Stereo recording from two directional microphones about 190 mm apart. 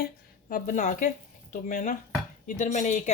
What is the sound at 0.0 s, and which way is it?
A woman's voice, 45° left (ahead or behind).